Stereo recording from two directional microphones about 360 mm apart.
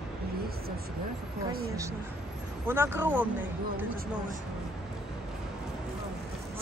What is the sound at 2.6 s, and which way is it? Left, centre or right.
Speech, centre.